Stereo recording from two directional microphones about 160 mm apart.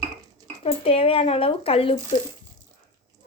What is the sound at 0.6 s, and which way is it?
Speech, 40° left (ahead or behind).